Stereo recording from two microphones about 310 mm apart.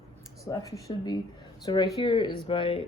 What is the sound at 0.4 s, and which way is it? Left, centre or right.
Speech, centre.